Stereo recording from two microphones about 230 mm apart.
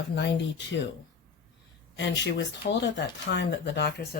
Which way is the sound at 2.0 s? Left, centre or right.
Left.